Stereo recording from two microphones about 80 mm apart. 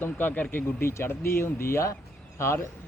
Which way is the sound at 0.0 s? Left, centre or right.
Left.